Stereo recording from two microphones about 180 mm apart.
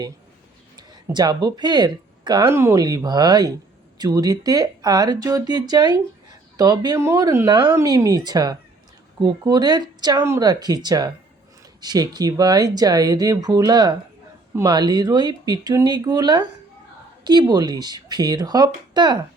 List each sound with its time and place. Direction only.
0.8 s speech: 20° right (ahead or behind)